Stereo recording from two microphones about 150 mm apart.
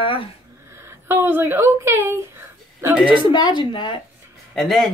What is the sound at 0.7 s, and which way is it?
Speech, 15° right (ahead or behind).